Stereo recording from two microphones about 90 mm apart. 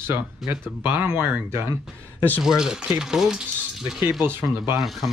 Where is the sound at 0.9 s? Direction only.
25° right (ahead or behind).